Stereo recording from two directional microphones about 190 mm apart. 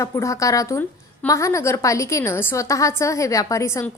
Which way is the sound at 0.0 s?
15° left (ahead or behind).